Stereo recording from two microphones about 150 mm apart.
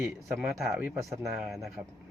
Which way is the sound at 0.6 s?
15° right (ahead or behind).